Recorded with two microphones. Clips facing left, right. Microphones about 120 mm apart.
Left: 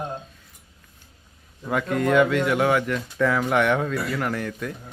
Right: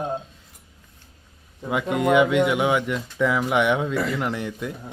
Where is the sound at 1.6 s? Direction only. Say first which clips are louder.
Right 1 dB; 15° right (ahead or behind).